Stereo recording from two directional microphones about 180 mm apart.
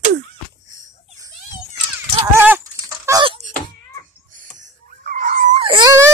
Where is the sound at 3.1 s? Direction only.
25° right (ahead or behind).